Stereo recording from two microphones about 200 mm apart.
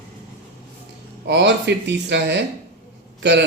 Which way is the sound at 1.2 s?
60° right (ahead or behind).